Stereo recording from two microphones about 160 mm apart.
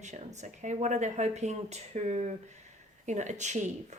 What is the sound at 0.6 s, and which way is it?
Speech, 50° right (ahead or behind).